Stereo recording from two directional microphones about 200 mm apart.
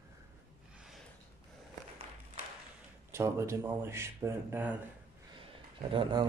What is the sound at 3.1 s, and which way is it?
Speech, 15° right (ahead or behind).